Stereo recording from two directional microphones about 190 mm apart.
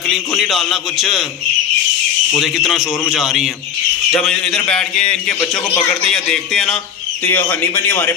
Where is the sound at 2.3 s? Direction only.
Centre (ahead or behind).